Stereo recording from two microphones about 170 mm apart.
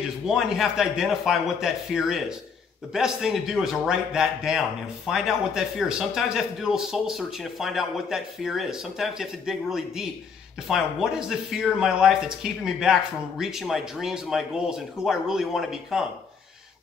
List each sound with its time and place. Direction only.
0.3 s a man's voice: 5° right (ahead or behind)